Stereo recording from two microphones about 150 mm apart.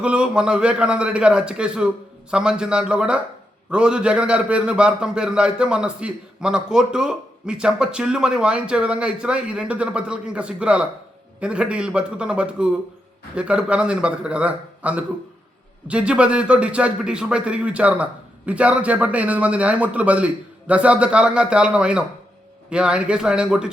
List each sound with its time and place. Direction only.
0.0 s a man's voice: 5° right (ahead or behind)